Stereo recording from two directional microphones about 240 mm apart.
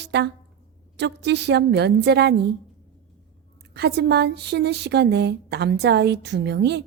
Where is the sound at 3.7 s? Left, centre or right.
Right.